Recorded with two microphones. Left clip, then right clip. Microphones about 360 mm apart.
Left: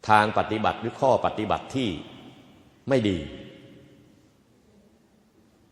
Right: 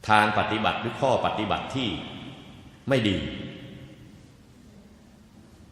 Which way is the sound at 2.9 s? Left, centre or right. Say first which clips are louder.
Left 1 dB; left.